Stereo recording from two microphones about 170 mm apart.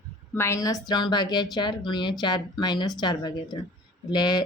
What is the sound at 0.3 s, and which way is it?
Speech, 15° left (ahead or behind).